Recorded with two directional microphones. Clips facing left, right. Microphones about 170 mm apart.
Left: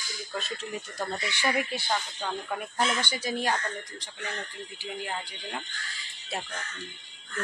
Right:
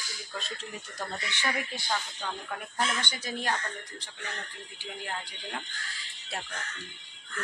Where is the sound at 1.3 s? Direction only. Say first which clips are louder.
Left 5 dB; 10° left (ahead or behind).